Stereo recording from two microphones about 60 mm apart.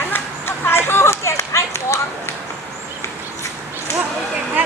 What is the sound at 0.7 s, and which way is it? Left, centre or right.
Run, left.